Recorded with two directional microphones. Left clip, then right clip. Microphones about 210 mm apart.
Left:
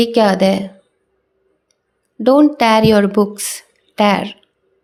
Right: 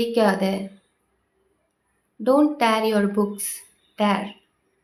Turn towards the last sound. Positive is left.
turn(degrees=40)  # may be behind; listen again after turning